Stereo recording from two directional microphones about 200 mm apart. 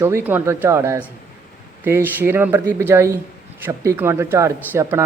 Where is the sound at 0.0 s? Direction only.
10° right (ahead or behind).